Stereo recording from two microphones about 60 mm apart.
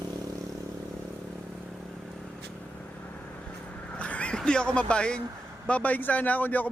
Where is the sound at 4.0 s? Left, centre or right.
Left.